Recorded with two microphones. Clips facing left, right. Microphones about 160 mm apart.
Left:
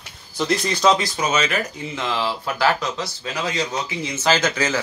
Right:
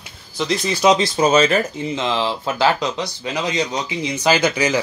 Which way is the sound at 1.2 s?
30° right (ahead or behind).